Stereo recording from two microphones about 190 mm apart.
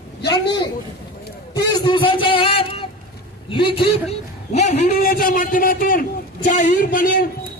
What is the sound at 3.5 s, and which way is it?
A man's voice, 30° left (ahead or behind).